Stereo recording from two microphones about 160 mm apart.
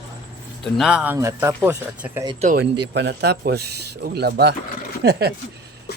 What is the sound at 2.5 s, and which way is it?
Speech, 90° right.